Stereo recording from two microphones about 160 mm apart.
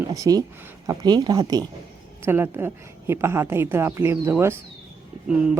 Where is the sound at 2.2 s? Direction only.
15° right (ahead or behind).